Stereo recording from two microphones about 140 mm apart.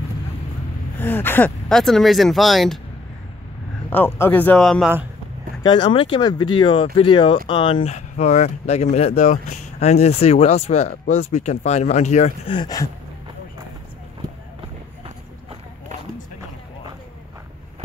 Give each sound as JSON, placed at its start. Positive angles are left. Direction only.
{"t": 0.9, "sound": "gasp", "side_deg": 15}
{"t": 1.7, "sound": "speech", "side_deg": 0}
{"t": 3.9, "sound": "speech", "side_deg": 15}
{"t": 5.6, "sound": "speech", "side_deg": 35}
{"t": 12.4, "sound": "speech", "side_deg": 30}